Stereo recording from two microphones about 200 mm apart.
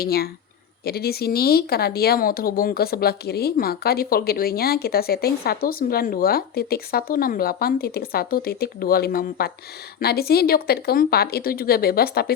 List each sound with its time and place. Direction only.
0.0 s speech: 50° left (ahead or behind)